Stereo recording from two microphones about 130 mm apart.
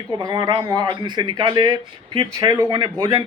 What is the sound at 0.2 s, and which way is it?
Speech, 30° right (ahead or behind).